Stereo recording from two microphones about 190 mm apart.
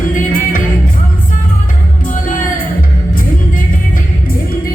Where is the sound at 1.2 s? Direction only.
45° left (ahead or behind).